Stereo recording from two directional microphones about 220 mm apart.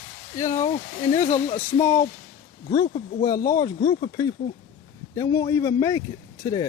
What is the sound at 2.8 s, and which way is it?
Speech, 30° left (ahead or behind).